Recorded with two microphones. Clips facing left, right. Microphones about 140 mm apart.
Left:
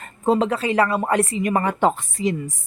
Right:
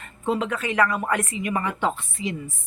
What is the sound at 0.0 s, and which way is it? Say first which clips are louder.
A woman's voice: left 6 dB; 35° left (ahead or behind).